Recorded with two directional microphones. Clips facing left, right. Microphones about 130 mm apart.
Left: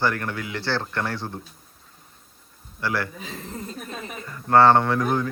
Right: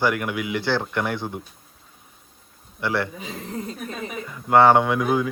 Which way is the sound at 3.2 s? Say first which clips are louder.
Right 3 dB; centre (ahead or behind).